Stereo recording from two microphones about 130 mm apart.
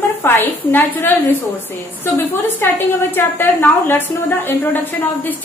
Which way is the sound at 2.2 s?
15° left (ahead or behind).